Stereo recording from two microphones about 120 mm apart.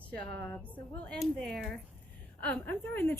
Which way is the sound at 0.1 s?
15° left (ahead or behind).